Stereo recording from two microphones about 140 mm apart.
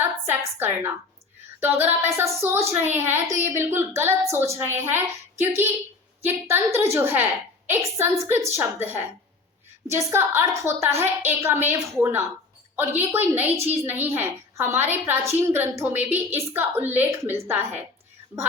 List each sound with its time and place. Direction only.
0.0 s a woman's voice: 15° right (ahead or behind)